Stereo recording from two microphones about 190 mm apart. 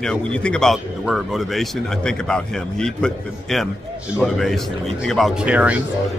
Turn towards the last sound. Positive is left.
turn(degrees=-5)  # may be behind; listen again after turning